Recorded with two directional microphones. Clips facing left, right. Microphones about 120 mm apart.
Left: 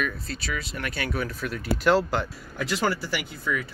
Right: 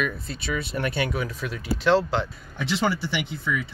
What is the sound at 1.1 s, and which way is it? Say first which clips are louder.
Speech: even; 10° right (ahead or behind).